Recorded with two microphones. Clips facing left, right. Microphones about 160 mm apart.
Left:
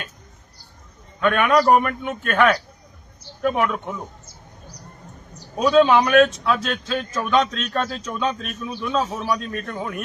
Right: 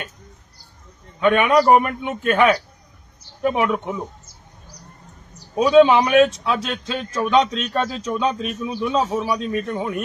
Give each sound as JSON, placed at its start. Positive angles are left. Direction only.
{"t": 1.2, "sound": "a man's voice", "side_deg": -5}
{"t": 5.5, "sound": "a man's voice", "side_deg": -5}
{"t": 7.3, "sound": "a man's voice", "side_deg": -15}